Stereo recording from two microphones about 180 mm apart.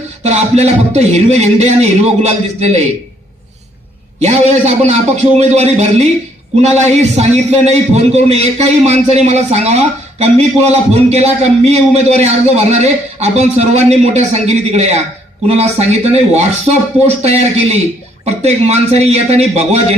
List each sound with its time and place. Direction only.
0.2 s a man's voice: 40° right (ahead or behind)
4.2 s a man's voice: 40° right (ahead or behind)